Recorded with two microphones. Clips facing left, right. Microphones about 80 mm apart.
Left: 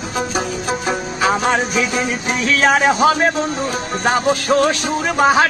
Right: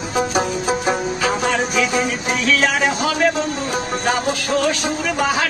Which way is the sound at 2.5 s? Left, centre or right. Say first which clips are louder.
Left 9 dB; left.